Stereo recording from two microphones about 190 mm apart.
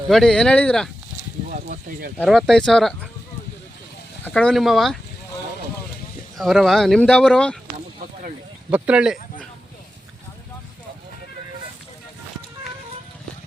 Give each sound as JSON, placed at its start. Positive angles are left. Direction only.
{"t": 0.1, "sound": "speech", "side_deg": 0}
{"t": 1.5, "sound": "speech", "side_deg": -45}
{"t": 2.1, "sound": "speech", "side_deg": 0}
{"t": 4.2, "sound": "speech", "side_deg": 5}
{"t": 6.3, "sound": "speech", "side_deg": 0}
{"t": 8.7, "sound": "speech", "side_deg": -5}